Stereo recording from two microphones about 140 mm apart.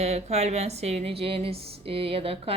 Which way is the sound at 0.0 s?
50° right (ahead or behind).